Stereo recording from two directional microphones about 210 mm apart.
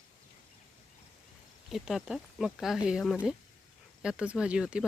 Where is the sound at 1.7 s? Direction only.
Centre (ahead or behind).